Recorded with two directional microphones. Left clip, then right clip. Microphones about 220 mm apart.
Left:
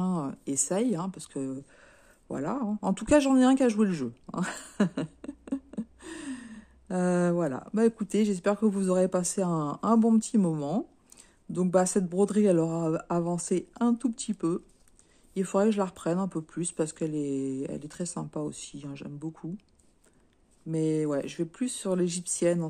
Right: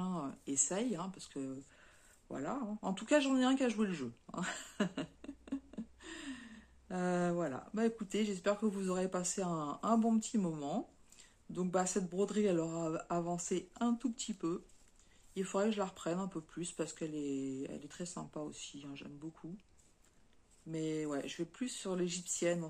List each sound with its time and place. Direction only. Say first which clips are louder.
0.0 s speech: left 9 dB; 45° left (ahead or behind)
20.7 s speech: left 11 dB; 50° left (ahead or behind)